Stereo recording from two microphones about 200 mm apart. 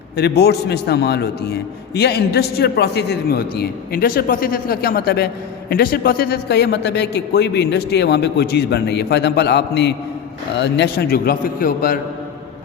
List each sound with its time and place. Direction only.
0.2 s a man's voice: 55° left (ahead or behind)